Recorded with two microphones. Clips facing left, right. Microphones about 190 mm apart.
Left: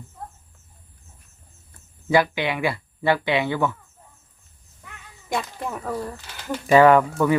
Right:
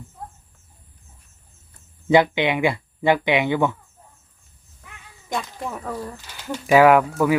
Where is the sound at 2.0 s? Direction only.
20° right (ahead or behind).